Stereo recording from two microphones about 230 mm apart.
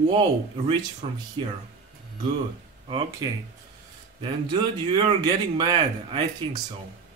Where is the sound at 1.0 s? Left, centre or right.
Right.